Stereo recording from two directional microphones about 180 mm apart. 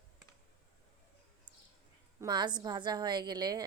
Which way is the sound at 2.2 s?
25° right (ahead or behind).